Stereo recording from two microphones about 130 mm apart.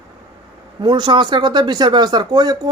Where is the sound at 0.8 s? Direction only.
35° right (ahead or behind).